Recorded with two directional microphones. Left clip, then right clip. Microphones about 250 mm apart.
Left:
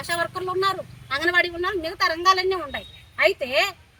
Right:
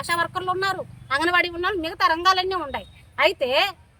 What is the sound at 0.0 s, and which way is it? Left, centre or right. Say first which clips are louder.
A woman's voice: right 2 dB; right.